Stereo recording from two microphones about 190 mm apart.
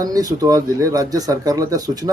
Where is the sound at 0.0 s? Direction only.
20° right (ahead or behind).